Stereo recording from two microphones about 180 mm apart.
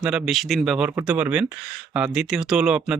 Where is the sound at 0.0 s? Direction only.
5° right (ahead or behind).